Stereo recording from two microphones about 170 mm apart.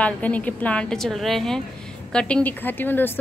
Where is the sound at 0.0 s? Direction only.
10° left (ahead or behind).